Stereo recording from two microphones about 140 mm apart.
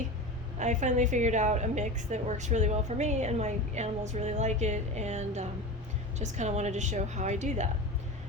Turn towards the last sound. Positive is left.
turn(degrees=-55)  # may be behind; listen again after turning